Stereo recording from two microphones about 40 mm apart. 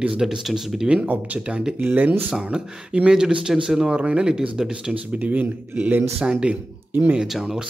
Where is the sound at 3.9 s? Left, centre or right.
Right.